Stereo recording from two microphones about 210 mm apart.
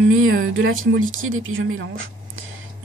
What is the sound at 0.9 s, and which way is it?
A woman's voice, 70° right (ahead or behind).